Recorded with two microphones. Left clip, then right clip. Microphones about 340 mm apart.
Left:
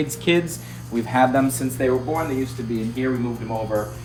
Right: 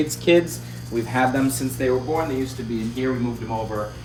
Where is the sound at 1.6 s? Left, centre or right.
Centre.